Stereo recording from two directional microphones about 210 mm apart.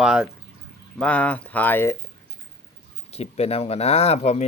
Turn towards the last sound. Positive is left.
turn(degrees=30)  # may be behind; listen again after turning